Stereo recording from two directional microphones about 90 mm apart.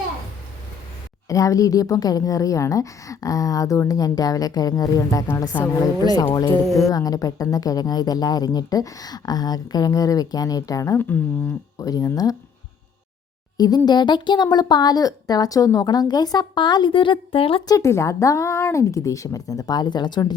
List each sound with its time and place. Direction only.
1.3 s a woman's voice: 40° left (ahead or behind)
10.9 s speech: 25° left (ahead or behind)
11.8 s a woman's voice: 40° left (ahead or behind)
13.6 s a woman's voice: 50° left (ahead or behind); by 17.6 s 90° left
17.7 s a woman's voice: 35° left (ahead or behind); by 20.3 s 55° left (ahead or behind)